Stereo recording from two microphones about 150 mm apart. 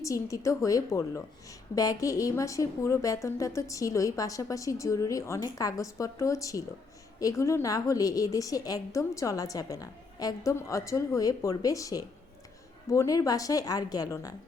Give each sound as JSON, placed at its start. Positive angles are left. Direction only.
{"t": 0.0, "sound": "a woman's voice", "side_deg": 20}